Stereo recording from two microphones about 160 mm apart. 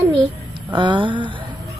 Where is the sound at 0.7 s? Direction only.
30° right (ahead or behind).